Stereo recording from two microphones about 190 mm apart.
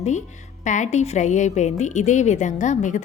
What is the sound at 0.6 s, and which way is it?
A woman's voice, 40° left (ahead or behind).